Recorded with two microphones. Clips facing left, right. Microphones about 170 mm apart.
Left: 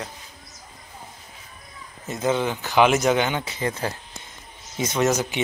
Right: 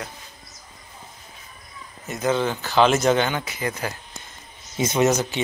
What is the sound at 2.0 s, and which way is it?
Speech, 25° left (ahead or behind).